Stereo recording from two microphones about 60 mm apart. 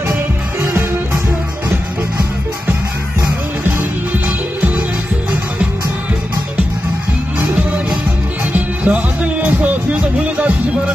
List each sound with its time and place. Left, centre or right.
4.6 s music: right
7.4 s music: right